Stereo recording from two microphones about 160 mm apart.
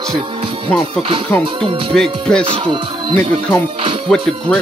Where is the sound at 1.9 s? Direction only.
5° left (ahead or behind).